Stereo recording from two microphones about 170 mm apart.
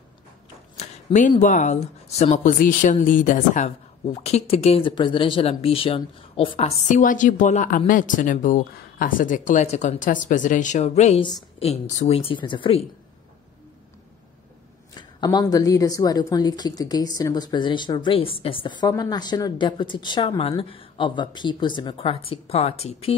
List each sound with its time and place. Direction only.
0.7 s a sound: 45° left (ahead or behind)
1.4 s speech: 45° left (ahead or behind)
6.9 s speech: 50° left (ahead or behind); by 12.8 s 30° left (ahead or behind)
15.0 s a woman's voice: 25° left (ahead or behind)